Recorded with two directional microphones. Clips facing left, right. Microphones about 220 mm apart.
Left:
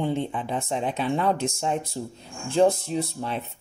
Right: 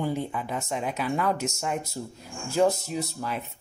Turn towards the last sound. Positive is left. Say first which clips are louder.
# left 3 dB
turn(degrees=30)  # may be behind; listen again after turning